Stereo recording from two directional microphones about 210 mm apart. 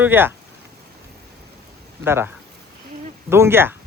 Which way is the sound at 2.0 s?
10° right (ahead or behind).